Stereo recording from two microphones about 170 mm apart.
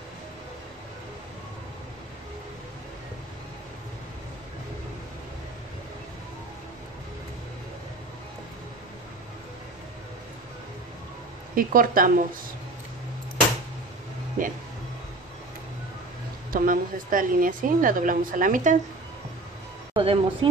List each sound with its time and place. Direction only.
11.5 s speech: 55° right (ahead or behind)
14.4 s a woman's voice: 50° right (ahead or behind)
16.5 s a woman's voice: 55° right (ahead or behind)
19.9 s speech: 35° right (ahead or behind)